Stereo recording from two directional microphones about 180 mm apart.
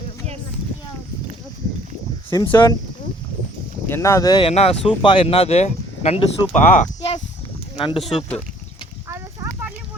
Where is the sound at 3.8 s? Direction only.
15° left (ahead or behind); by 6.8 s 45° left (ahead or behind).